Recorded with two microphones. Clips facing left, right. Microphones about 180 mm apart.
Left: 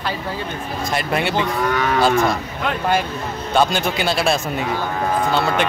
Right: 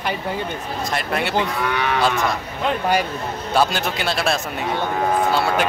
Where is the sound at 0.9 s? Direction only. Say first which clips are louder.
Left 3 dB; centre (ahead or behind).